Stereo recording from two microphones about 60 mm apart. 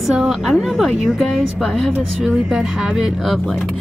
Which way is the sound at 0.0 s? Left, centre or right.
Centre.